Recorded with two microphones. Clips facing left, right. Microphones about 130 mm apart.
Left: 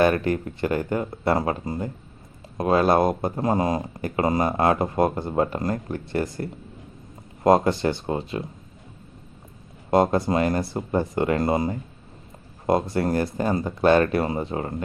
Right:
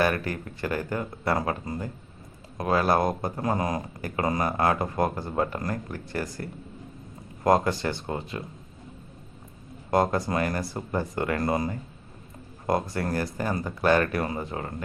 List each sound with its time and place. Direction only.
0.0 s speech: 25° left (ahead or behind)
9.9 s speech: 25° left (ahead or behind)